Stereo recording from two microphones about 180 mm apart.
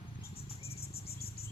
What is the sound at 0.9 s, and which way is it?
Cricket, 60° left (ahead or behind).